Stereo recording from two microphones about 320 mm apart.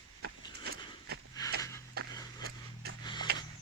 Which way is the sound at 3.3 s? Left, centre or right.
Right.